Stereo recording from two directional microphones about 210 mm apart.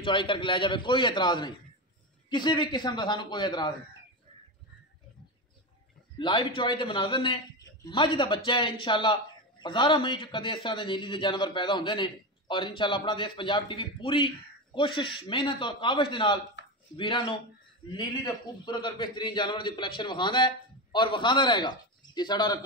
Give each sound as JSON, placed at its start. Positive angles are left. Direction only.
{"t": 0.0, "sound": "a man's voice", "side_deg": 25}
{"t": 6.1, "sound": "a man's voice", "side_deg": 25}
{"t": 16.6, "sound": "a sound", "side_deg": 60}
{"t": 16.9, "sound": "a man's voice", "side_deg": 25}